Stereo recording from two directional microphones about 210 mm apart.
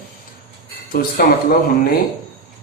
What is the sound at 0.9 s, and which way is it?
Speech, 45° left (ahead or behind).